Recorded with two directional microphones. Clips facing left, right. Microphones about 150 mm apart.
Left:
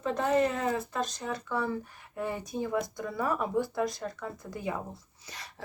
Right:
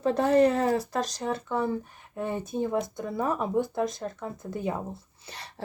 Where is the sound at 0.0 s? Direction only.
35° right (ahead or behind).